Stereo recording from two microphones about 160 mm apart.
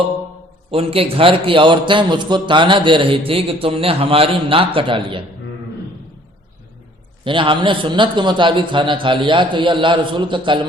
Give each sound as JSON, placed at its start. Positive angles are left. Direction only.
{"t": 0.7, "sound": "a man's voice", "side_deg": -35}
{"t": 7.3, "sound": "a man's voice", "side_deg": -30}